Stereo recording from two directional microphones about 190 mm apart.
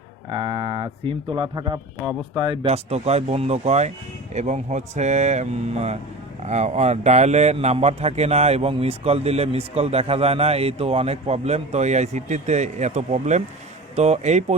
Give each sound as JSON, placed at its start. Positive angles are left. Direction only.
{"t": 0.3, "sound": "speech", "side_deg": -25}